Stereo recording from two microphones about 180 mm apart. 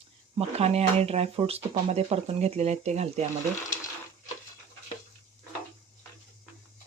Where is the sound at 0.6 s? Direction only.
35° right (ahead or behind).